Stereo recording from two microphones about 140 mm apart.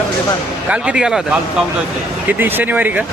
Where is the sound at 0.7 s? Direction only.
5° right (ahead or behind).